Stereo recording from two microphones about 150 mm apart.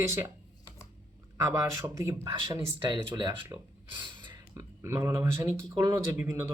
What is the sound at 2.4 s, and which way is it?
Speech, 30° right (ahead or behind).